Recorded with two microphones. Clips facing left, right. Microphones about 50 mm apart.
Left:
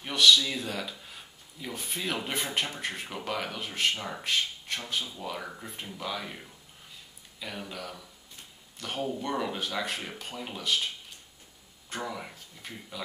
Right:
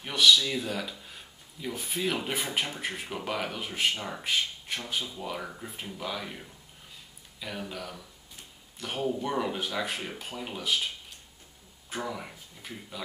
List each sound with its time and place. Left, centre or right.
0.0 s speech: centre